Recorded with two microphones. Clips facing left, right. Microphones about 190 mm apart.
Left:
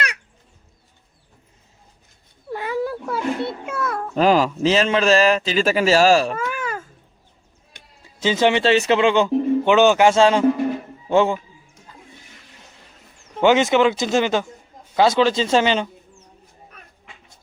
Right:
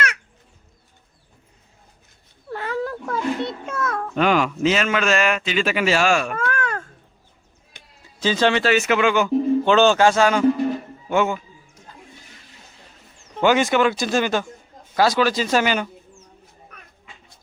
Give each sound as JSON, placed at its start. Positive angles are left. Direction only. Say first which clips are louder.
{"t": 2.5, "sound": "cat", "louder": "left 2 dB", "side_deg": 15}
{"t": 4.1, "sound": "speech", "louder": "left 3 dB", "side_deg": 35}
{"t": 6.3, "sound": "a sound", "louder": "right 1 dB", "side_deg": 5}
{"t": 8.2, "sound": "speech", "louder": "left 2 dB", "side_deg": 20}
{"t": 9.7, "sound": "speech", "louder": "left 2 dB", "side_deg": 15}
{"t": 13.4, "sound": "speech", "louder": "left 2 dB", "side_deg": 20}